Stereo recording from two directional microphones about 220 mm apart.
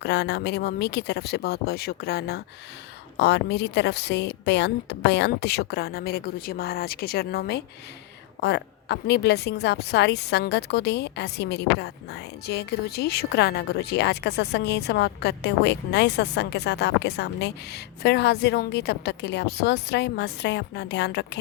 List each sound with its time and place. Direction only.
0.0 s a woman's voice: 50° left (ahead or behind)